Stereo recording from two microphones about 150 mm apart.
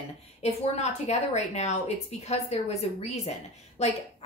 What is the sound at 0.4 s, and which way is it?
A woman's voice, 50° left (ahead or behind).